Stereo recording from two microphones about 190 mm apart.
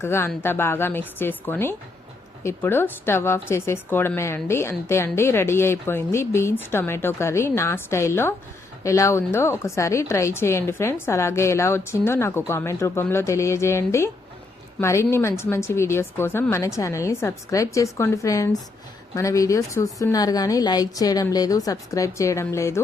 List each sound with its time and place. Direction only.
0.0 s a woman's voice: 10° left (ahead or behind)